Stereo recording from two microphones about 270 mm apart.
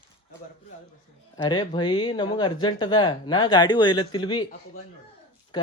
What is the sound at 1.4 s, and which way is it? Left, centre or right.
Speech, centre.